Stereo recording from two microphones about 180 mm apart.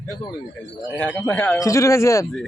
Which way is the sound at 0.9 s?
10° left (ahead or behind).